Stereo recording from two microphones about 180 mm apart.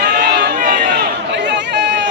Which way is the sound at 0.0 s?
50° right (ahead or behind).